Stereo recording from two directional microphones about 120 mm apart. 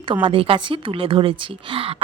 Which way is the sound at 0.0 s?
45° right (ahead or behind).